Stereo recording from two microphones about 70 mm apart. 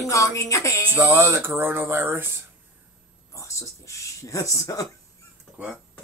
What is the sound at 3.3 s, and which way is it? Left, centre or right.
Speech, left.